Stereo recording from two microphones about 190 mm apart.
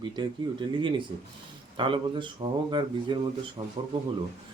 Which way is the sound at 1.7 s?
25° right (ahead or behind).